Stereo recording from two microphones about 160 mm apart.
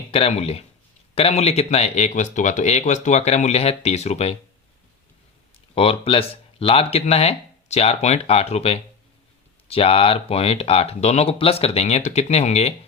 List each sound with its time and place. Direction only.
0.1 s speech: 40° left (ahead or behind)
5.7 s speech: 35° left (ahead or behind)